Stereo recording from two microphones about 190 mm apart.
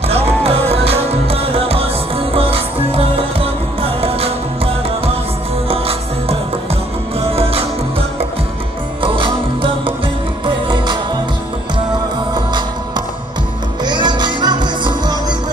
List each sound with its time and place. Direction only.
0.1 s music: 30° right (ahead or behind)
9.0 s music: 25° right (ahead or behind)
12.4 s music: 25° right (ahead or behind)